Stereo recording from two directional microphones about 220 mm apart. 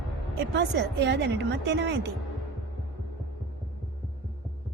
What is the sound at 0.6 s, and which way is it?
A woman's voice, 55° right (ahead or behind).